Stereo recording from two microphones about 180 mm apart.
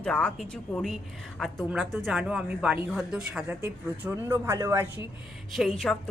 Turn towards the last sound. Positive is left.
turn(degrees=0)  # may be behind; listen again after turning